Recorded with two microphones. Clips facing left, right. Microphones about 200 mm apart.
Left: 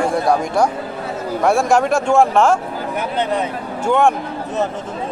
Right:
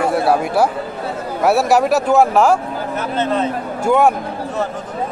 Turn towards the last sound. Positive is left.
turn(degrees=-5)  # may be behind; listen again after turning